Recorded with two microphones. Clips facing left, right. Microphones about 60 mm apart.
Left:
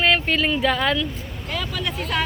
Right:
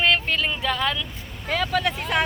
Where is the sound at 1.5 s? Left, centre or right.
Right.